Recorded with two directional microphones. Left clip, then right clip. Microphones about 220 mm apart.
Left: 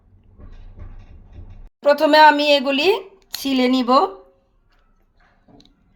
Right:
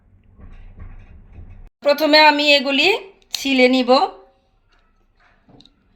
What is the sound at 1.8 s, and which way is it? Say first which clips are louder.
Speech: left 1 dB; 35° left (ahead or behind).